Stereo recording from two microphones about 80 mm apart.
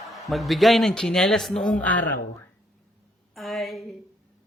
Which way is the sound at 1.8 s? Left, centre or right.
Centre.